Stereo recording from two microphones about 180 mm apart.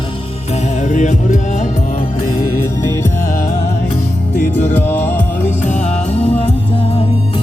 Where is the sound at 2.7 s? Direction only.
15° left (ahead or behind).